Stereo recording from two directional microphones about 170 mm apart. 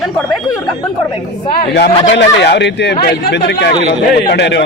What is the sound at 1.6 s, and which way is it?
A man's voice, 80° left.